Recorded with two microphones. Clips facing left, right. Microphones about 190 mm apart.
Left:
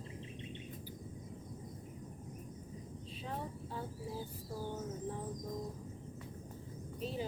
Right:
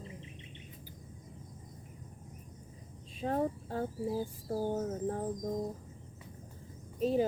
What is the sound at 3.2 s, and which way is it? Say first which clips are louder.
Speech: right 12 dB; 50° right (ahead or behind).